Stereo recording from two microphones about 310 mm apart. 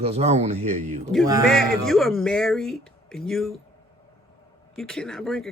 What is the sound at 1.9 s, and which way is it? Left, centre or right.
Speech, centre.